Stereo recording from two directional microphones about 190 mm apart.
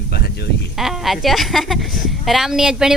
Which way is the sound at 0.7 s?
Centre (ahead or behind).